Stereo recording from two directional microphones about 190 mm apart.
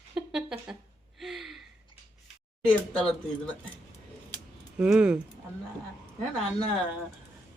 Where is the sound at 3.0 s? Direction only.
5° left (ahead or behind).